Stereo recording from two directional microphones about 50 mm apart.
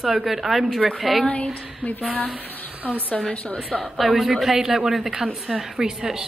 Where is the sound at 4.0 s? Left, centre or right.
Centre.